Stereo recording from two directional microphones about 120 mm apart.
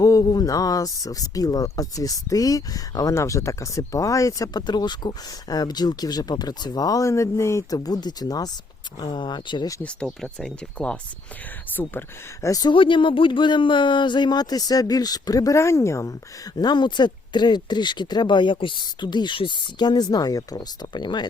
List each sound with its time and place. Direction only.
0.0 s speech: 30° left (ahead or behind)
10.1 s speech: 5° left (ahead or behind)
11.8 s speech: 15° left (ahead or behind)
12.5 s speech: 30° left (ahead or behind)
12.7 s speech: 45° left (ahead or behind); by 16.1 s 25° left (ahead or behind)
16.6 s speech: 35° left (ahead or behind)